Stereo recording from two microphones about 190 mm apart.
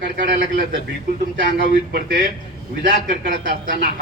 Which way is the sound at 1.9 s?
50° right (ahead or behind).